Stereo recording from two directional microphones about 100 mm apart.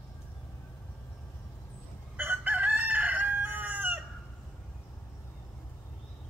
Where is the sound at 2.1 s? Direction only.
20° right (ahead or behind).